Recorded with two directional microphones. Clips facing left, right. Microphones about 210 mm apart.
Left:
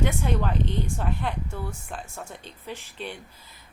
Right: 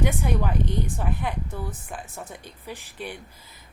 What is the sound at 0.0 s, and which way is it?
A woman's voice, 10° right (ahead or behind).